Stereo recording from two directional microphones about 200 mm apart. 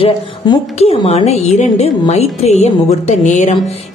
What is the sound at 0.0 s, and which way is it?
A woman's voice, 30° left (ahead or behind).